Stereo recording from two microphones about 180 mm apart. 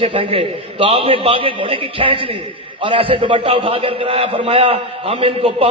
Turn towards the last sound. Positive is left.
turn(degrees=-30)  # may be behind; listen again after turning